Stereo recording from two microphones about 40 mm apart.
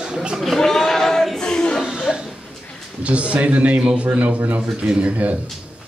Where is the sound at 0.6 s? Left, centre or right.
Centre.